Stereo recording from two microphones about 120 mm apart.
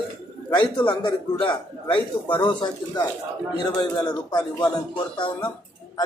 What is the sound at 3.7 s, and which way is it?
A man's voice, 35° left (ahead or behind).